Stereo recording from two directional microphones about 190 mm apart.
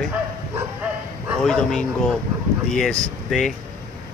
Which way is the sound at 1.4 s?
5° left (ahead or behind).